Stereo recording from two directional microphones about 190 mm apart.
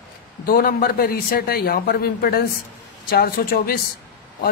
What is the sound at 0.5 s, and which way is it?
A man's voice, 50° left (ahead or behind).